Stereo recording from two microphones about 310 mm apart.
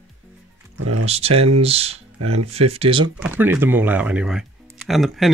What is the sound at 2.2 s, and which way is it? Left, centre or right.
Speech, right.